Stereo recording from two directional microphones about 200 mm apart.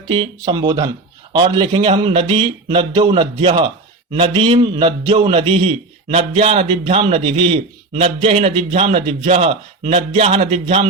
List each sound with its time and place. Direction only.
0.1 s a man's voice: 25° right (ahead or behind)